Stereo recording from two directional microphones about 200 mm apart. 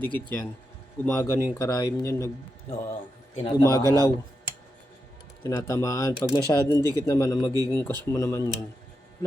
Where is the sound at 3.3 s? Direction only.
30° left (ahead or behind).